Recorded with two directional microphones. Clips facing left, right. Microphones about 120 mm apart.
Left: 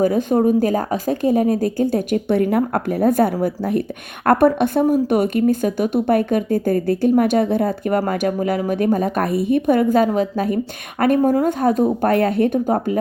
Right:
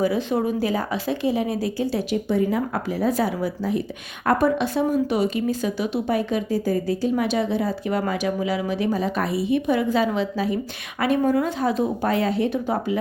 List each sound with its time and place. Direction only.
0.0 s speech: 50° left (ahead or behind)
11.2 s speech: 40° left (ahead or behind)